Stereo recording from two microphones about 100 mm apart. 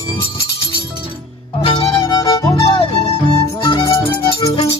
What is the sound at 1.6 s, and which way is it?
Music, 70° left (ahead or behind).